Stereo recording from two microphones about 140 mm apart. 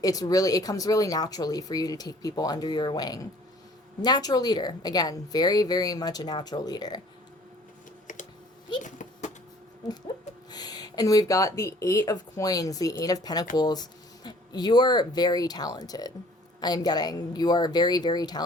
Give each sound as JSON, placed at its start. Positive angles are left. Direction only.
{"t": 0.0, "sound": "speech", "side_deg": 25}
{"t": 8.0, "sound": "computer keyboard", "side_deg": 65}
{"t": 8.8, "sound": "a sound", "side_deg": 65}
{"t": 10.5, "sound": "speech", "side_deg": 30}